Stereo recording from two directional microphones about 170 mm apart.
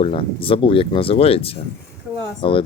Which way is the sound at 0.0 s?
30° left (ahead or behind).